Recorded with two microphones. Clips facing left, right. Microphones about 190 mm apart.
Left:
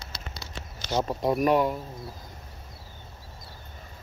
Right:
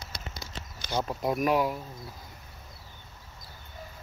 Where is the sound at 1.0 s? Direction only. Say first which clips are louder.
Left 4 dB; centre (ahead or behind).